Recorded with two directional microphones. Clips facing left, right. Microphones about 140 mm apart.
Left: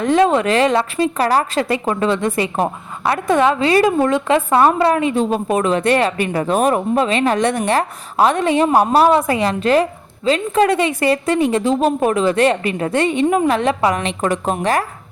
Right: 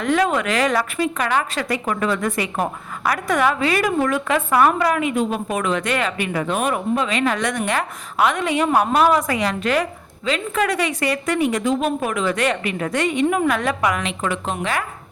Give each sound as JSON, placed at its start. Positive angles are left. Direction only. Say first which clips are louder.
{"t": 0.0, "sound": "a woman's voice", "louder": "left 5 dB", "side_deg": 30}